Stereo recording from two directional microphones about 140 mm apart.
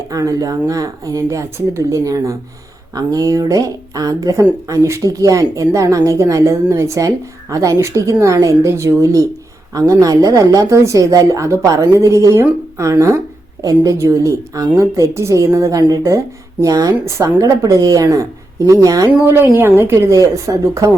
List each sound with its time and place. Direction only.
0.1 s speech: 25° right (ahead or behind)